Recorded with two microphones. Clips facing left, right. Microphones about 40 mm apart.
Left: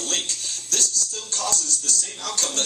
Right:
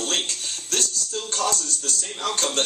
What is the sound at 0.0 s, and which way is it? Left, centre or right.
Speech, right.